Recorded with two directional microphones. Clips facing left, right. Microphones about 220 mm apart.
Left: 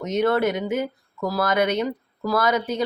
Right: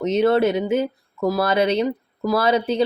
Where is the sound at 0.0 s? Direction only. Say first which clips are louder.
Right 4 dB; 30° right (ahead or behind).